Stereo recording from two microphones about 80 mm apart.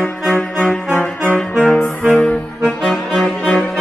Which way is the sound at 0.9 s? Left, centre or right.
Centre.